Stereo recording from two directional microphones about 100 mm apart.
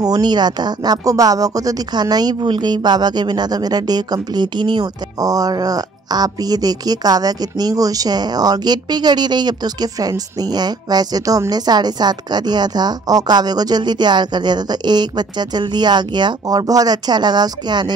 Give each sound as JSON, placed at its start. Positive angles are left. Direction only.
{"t": 0.0, "sound": "speech", "side_deg": -45}